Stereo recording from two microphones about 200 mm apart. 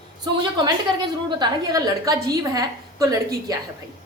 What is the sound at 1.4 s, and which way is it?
A woman's voice, 20° right (ahead or behind).